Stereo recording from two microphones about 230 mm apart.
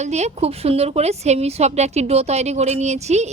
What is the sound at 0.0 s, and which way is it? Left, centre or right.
A woman's voice, right.